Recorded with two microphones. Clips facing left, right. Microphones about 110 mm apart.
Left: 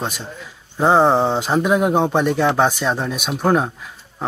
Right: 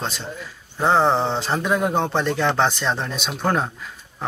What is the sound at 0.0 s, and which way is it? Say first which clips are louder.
Speech: left 2 dB; 15° left (ahead or behind).